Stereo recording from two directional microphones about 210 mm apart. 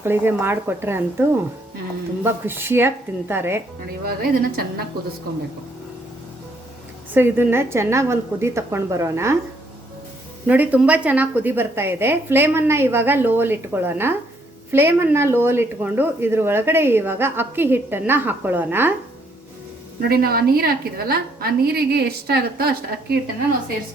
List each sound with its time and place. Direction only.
0.0 s speech: 10° right (ahead or behind)
4.0 s a woman's voice: 45° right (ahead or behind)
7.1 s speech: 10° right (ahead or behind)
10.4 s speech: 10° right (ahead or behind)
20.0 s a woman's voice: 45° right (ahead or behind)